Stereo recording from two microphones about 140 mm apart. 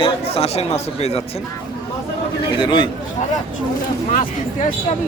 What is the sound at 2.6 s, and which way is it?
Speech, 35° left (ahead or behind).